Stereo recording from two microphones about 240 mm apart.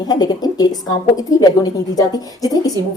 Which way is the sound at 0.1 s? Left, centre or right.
Centre.